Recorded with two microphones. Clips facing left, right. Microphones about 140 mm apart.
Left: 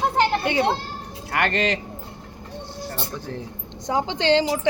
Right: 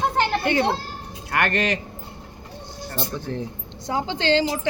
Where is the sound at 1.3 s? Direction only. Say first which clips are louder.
Even; 20° left (ahead or behind).